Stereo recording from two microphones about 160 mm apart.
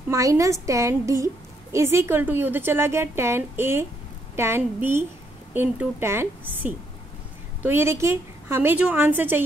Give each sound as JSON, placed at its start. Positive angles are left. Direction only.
{"t": 0.1, "sound": "a woman's voice", "side_deg": -20}